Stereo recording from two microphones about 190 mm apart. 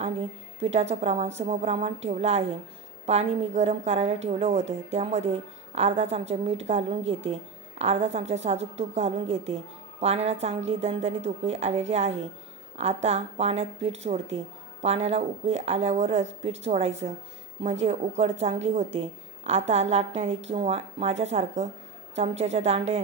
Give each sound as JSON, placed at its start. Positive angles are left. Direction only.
{"t": 0.0, "sound": "a woman's voice", "side_deg": -35}